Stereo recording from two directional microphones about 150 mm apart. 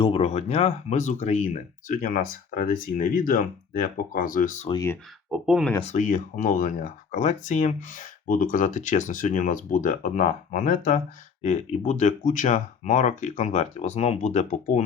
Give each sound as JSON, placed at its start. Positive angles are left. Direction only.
{"t": 0.0, "sound": "speech", "side_deg": 40}
{"t": 4.7, "sound": "speech", "side_deg": 20}
{"t": 5.3, "sound": "speech", "side_deg": -5}
{"t": 5.8, "sound": "speech", "side_deg": 55}